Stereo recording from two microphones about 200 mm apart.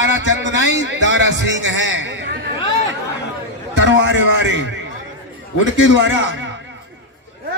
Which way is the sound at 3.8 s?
65° right (ahead or behind).